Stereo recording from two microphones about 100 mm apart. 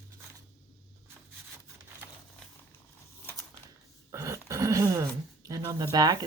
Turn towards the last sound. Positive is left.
turn(degrees=-40)  # may be behind; listen again after turning